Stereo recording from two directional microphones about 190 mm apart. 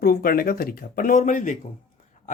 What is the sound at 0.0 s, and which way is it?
Speech, 50° left (ahead or behind).